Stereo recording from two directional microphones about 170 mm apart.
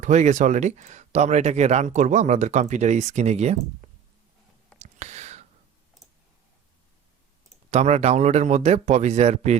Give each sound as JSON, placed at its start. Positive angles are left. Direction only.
{"t": 0.0, "sound": "speech", "side_deg": -45}
{"t": 4.8, "sound": "whispering", "side_deg": -45}
{"t": 7.7, "sound": "speech", "side_deg": -40}